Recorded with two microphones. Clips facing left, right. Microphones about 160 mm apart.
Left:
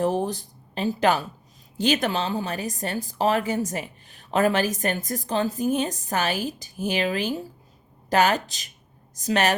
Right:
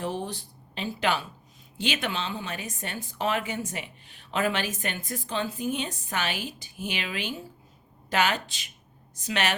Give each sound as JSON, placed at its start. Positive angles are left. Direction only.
{"t": 0.0, "sound": "speech", "side_deg": 45}